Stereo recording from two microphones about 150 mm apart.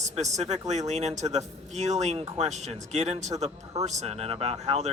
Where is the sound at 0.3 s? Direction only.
50° right (ahead or behind).